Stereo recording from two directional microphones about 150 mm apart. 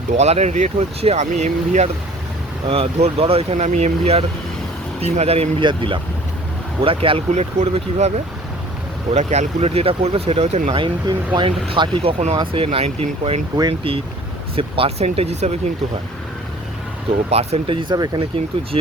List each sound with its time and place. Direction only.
0.1 s speech: 50° right (ahead or behind)
2.6 s speech: 40° right (ahead or behind)
9.1 s speech: 50° right (ahead or behind)
13.6 s speech: 35° right (ahead or behind)
17.2 s speech: 45° right (ahead or behind); by 18.2 s 25° right (ahead or behind)